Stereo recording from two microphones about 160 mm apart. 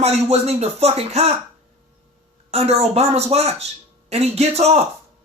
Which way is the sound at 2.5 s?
40° right (ahead or behind).